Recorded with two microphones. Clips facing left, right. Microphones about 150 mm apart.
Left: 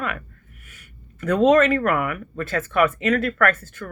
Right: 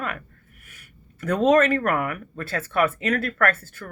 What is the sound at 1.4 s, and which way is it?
Speech, 45° right (ahead or behind).